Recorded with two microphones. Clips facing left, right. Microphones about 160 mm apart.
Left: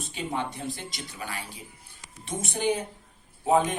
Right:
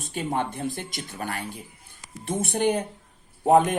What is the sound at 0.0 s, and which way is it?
Speech, 50° right (ahead or behind).